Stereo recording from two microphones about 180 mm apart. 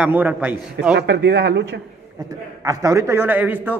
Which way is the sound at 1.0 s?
65° right (ahead or behind).